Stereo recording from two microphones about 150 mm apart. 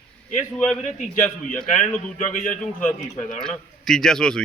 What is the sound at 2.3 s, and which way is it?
Speech, 60° left (ahead or behind).